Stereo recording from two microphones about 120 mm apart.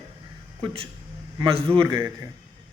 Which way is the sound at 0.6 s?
50° right (ahead or behind).